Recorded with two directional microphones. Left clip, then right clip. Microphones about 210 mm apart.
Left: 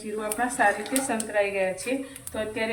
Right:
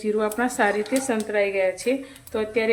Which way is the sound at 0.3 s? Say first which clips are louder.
Right 1 dB; 55° right (ahead or behind).